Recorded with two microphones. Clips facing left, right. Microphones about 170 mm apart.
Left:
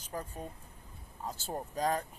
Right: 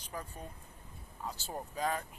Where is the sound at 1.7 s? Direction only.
40° left (ahead or behind).